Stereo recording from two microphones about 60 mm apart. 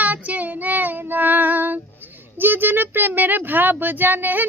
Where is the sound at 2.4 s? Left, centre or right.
Right.